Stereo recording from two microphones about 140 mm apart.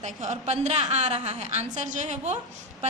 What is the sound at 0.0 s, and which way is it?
A woman's voice, 55° right (ahead or behind).